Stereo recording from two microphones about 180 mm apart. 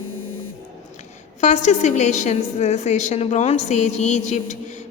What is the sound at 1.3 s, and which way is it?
A woman's voice, 40° left (ahead or behind).